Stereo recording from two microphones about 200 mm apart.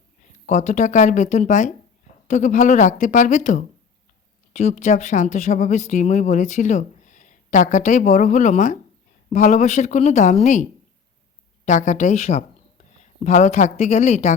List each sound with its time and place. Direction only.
0.4 s speech: 35° left (ahead or behind)